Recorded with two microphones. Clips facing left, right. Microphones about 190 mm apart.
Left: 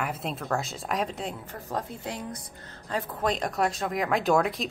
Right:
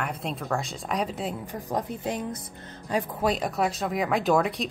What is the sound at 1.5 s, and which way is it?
Speech, 15° right (ahead or behind).